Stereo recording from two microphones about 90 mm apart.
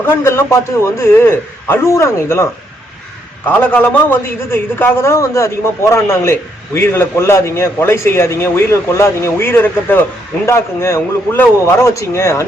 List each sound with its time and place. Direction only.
0.0 s a man's voice: 25° left (ahead or behind)